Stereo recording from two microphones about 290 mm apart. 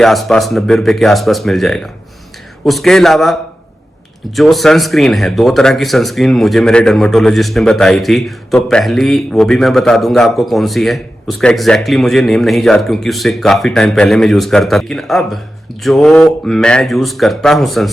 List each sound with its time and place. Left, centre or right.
0.0 s speech: centre
4.4 s speech: centre